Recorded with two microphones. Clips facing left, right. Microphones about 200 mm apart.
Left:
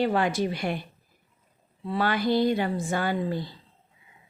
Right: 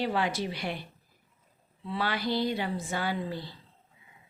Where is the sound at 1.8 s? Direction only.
50° left (ahead or behind).